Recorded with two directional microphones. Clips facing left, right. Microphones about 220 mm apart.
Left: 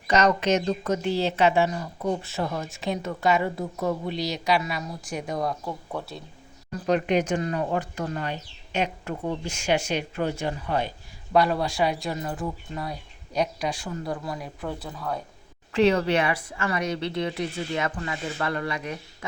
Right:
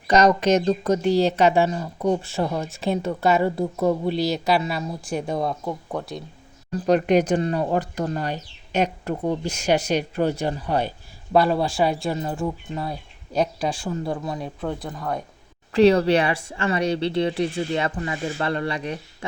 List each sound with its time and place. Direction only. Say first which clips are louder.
0.1 s speech: right 4 dB; 35° right (ahead or behind)
6.7 s speech: right 5 dB; 40° right (ahead or behind)
14.8 s speech: right 4 dB; 10° right (ahead or behind)
15.7 s speech: right 5 dB; 35° right (ahead or behind)